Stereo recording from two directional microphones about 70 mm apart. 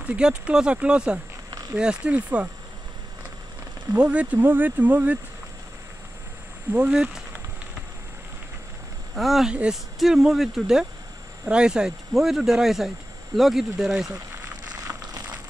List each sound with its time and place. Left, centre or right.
0.0 s speech: centre
3.9 s speech: centre
6.7 s speech: right
9.1 s speech: centre
9.5 s speech: centre